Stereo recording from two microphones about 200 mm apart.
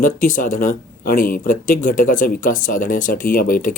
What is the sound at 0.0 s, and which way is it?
Speech, 40° left (ahead or behind).